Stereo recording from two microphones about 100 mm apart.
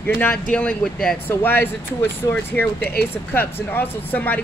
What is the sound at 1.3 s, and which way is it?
Speech, 20° left (ahead or behind).